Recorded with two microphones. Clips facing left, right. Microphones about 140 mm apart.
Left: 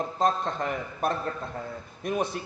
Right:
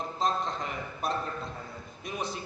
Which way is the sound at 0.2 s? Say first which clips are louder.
Left 4 dB; 55° left (ahead or behind).